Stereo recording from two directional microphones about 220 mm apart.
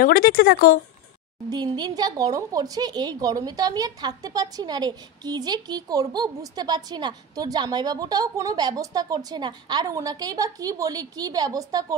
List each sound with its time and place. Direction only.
0.0 s speech: 40° left (ahead or behind)
1.5 s speech: 20° right (ahead or behind)